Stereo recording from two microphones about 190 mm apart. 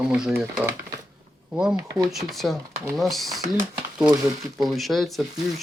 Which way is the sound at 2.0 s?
Centre (ahead or behind).